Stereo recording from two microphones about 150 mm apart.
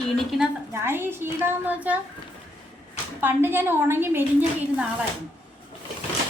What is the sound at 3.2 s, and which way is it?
A woman's voice, 15° right (ahead or behind).